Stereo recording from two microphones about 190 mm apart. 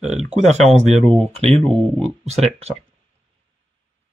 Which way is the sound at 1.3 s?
35° right (ahead or behind).